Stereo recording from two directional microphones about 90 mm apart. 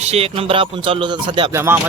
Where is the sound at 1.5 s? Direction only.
30° right (ahead or behind).